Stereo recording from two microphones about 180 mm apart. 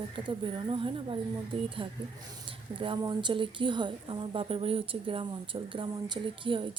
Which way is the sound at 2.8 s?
25° right (ahead or behind).